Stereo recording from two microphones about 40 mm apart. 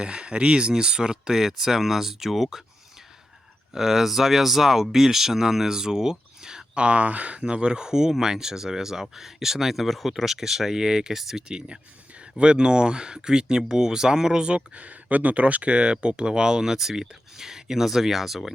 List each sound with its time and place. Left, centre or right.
0.0 s speech: right; by 2.6 s centre
3.7 s speech: centre
6.8 s speech: right; by 11.4 s centre
11.4 s speech: right; by 18.5 s centre